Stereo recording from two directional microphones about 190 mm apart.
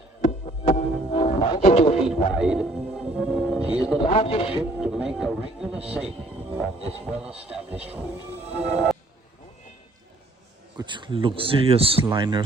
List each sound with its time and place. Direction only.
0.2 s music: 35° left (ahead or behind)
2.0 s speech: 5° right (ahead or behind)
3.3 s music: centre (ahead or behind)
4.0 s a man's voice: 30° left (ahead or behind)
4.8 s speech: 5° right (ahead or behind)
10.8 s speech: 25° right (ahead or behind)